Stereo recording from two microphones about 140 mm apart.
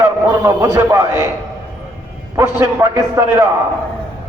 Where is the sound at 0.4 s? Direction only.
20° right (ahead or behind).